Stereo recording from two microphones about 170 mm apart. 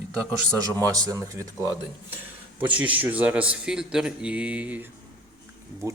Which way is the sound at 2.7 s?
10° right (ahead or behind).